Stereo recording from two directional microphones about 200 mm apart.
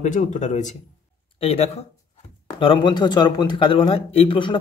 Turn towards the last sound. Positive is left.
turn(degrees=25)  # may be behind; listen again after turning